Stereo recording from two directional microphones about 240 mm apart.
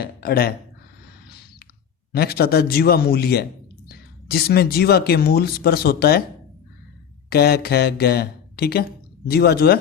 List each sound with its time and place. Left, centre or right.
0.0 s a man's voice: left
2.1 s a man's voice: left
7.3 s a man's voice: left